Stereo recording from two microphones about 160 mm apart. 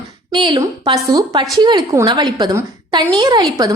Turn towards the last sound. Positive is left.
turn(degrees=-25)  # may be behind; listen again after turning